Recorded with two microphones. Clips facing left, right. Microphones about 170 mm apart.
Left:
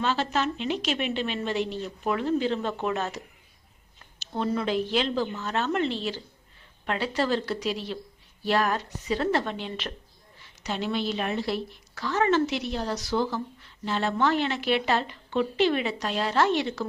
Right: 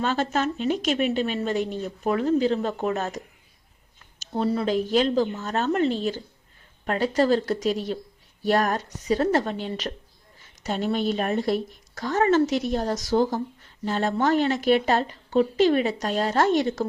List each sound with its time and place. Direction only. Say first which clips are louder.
0.0 s a woman's voice: right 2 dB; 45° right (ahead or behind)
4.2 s a woman's voice: right 3 dB; 35° right (ahead or behind)